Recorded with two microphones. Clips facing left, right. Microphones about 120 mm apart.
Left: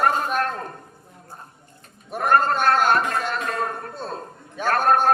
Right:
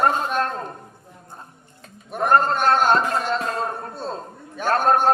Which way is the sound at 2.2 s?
25° right (ahead or behind).